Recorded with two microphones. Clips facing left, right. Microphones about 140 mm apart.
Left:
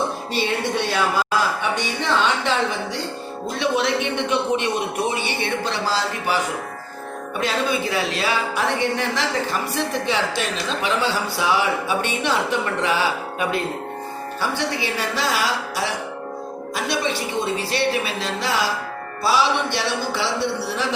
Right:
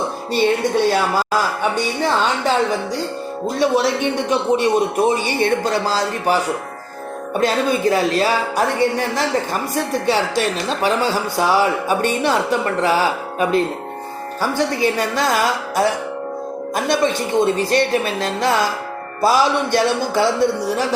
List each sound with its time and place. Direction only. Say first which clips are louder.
1.7 s a woman's voice: right 3 dB; 40° right (ahead or behind)
3.6 s a woman's voice: right 4 dB; 40° right (ahead or behind)